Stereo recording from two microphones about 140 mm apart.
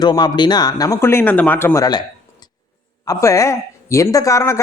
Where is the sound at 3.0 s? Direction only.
25° left (ahead or behind).